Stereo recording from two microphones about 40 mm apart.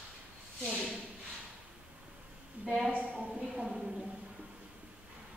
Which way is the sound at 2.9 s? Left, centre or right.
Right.